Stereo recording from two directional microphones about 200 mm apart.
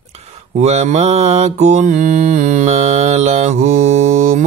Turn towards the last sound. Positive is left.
turn(degrees=-40)  # may be behind; listen again after turning